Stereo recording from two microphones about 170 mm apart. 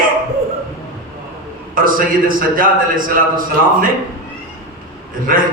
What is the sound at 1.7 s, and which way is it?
A man's voice, 55° right (ahead or behind).